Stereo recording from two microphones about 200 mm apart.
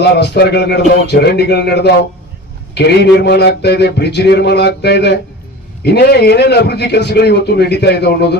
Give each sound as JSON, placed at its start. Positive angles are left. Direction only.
{"t": 0.0, "sound": "a man's voice", "side_deg": 55}